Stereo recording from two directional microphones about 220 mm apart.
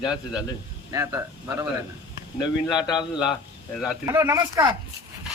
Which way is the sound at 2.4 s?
20° left (ahead or behind).